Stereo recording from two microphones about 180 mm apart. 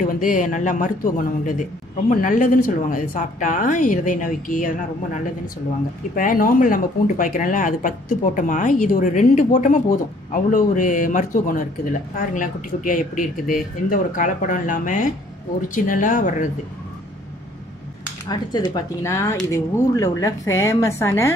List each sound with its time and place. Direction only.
0.0 s speech: 45° left (ahead or behind)
6.1 s speech: 50° left (ahead or behind)
18.3 s a woman's voice: 20° left (ahead or behind)